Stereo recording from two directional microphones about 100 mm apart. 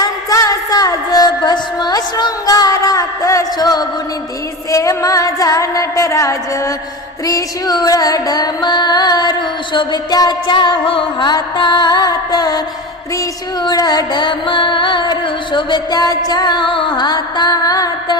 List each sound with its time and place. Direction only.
0.0 s music: 35° left (ahead or behind)
7.3 s carnatic music: 40° left (ahead or behind)